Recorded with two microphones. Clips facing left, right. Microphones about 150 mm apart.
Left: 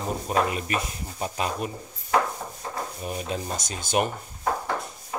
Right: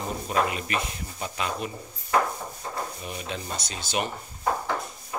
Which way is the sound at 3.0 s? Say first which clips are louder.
Left 4 dB; 40° left (ahead or behind).